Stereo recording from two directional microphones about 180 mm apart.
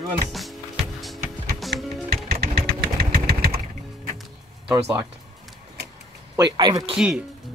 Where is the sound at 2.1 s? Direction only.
60° right (ahead or behind).